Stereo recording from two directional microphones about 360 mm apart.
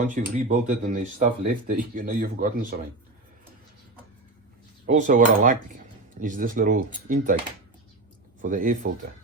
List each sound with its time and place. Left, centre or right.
0.1 s speech: right
4.9 s speech: right
8.4 s speech: right